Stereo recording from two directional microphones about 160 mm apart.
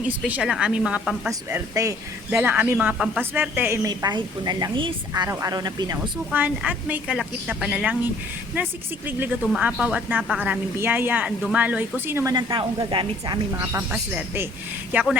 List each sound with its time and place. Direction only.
0.3 s a woman's voice: 5° right (ahead or behind)
1.3 s a woman's voice: 15° right (ahead or behind)
3.8 s a woman's voice: 25° right (ahead or behind)
6.3 s a woman's voice: 10° right (ahead or behind)
12.3 s a woman's voice: 30° right (ahead or behind)
13.9 s a woman's voice: 10° right (ahead or behind)